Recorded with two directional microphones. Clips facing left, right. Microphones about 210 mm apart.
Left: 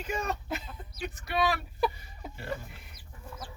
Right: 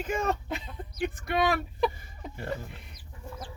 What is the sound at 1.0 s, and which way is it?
Speech, 50° right (ahead or behind).